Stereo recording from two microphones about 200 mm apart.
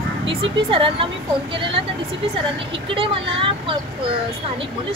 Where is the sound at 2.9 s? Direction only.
25° right (ahead or behind).